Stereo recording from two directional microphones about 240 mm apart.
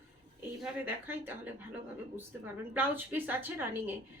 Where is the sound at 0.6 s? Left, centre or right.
Centre.